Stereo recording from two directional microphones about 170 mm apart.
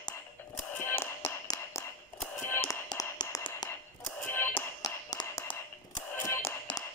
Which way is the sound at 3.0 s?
20° left (ahead or behind).